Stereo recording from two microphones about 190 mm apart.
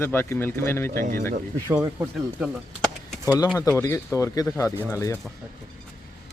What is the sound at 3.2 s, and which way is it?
Speech, 20° left (ahead or behind).